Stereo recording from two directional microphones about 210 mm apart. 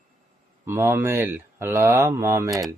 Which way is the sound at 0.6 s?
10° right (ahead or behind).